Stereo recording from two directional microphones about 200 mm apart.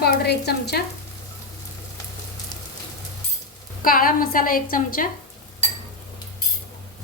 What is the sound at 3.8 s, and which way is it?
A woman's voice, 45° left (ahead or behind).